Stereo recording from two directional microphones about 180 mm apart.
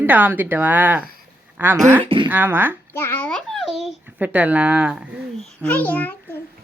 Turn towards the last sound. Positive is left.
turn(degrees=10)  # may be behind; listen again after turning